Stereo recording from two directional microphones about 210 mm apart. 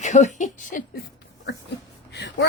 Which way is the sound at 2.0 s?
55° left (ahead or behind).